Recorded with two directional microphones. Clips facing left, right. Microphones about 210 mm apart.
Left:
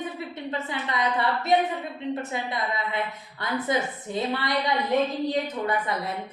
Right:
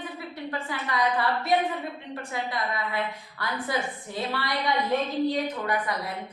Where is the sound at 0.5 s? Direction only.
20° left (ahead or behind).